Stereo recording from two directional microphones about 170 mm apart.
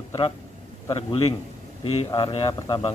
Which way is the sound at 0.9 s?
30° left (ahead or behind).